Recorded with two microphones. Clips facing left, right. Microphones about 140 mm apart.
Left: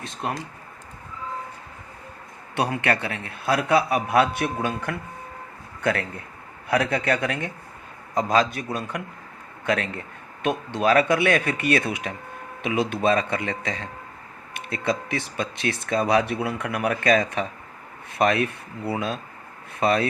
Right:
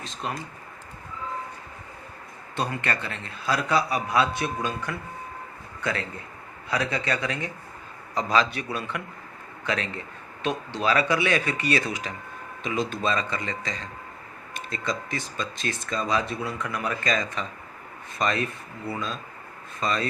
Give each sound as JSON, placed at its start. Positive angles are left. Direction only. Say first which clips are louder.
{"t": 0.0, "sound": "speech", "louder": "left 3 dB", "side_deg": 60}
{"t": 2.8, "sound": "a man's voice", "louder": "left 5 dB", "side_deg": 65}
{"t": 9.6, "sound": "a man's voice", "louder": "left 4 dB", "side_deg": 55}